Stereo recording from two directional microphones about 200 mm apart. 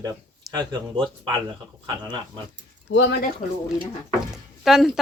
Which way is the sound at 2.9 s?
65° left (ahead or behind).